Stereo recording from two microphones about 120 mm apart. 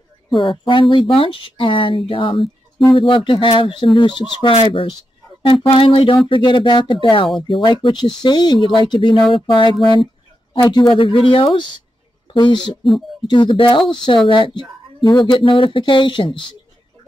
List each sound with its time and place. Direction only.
0.4 s speech: 45° left (ahead or behind)